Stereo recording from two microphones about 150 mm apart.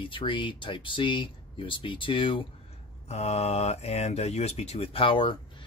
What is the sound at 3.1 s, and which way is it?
Speech, 45° left (ahead or behind).